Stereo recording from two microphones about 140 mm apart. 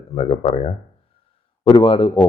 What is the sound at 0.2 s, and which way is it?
Speech, 45° left (ahead or behind).